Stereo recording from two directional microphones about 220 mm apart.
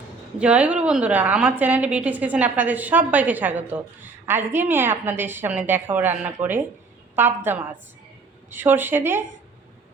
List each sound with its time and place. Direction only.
0.3 s a woman's voice: 5° right (ahead or behind)